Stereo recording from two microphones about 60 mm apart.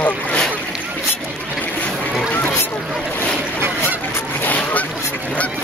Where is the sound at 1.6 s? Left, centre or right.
Left.